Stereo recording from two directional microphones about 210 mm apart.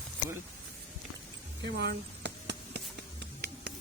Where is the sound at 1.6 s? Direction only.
55° right (ahead or behind).